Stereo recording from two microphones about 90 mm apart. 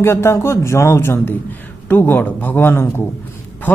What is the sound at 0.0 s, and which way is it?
Speech, 30° left (ahead or behind).